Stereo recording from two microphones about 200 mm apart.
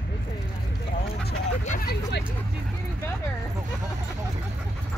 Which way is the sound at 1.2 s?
50° left (ahead or behind).